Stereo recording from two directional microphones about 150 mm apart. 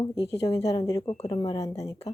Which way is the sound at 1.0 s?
45° left (ahead or behind).